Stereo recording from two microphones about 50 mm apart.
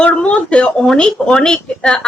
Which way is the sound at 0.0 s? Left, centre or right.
Centre.